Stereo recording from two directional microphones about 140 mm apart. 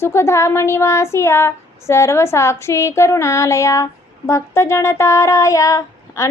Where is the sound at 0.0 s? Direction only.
20° left (ahead or behind).